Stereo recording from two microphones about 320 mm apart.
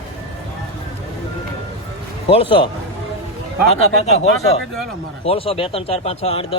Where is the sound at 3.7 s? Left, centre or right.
Centre.